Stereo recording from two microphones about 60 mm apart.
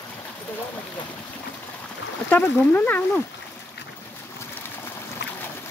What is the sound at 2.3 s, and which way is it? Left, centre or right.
Speech, left.